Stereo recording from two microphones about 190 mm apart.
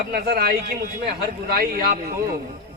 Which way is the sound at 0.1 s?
55° right (ahead or behind).